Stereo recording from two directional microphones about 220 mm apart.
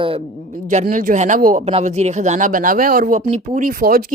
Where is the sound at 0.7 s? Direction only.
35° right (ahead or behind).